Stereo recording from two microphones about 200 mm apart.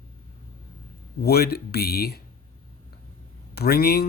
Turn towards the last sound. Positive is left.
turn(degrees=50)  # may be behind; listen again after turning